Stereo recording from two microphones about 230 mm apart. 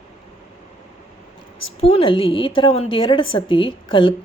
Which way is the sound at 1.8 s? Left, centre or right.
Left.